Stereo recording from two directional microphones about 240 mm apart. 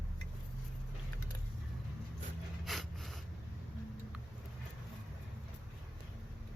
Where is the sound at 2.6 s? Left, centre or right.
Centre.